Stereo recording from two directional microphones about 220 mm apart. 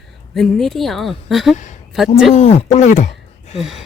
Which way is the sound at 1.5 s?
35° left (ahead or behind).